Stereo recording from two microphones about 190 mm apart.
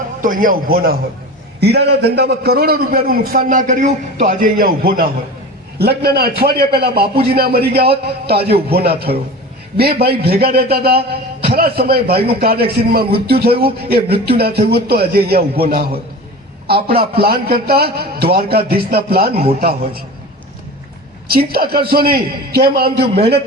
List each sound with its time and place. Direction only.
0.2 s a man's voice: 45° right (ahead or behind)
21.2 s a man's voice: 55° right (ahead or behind)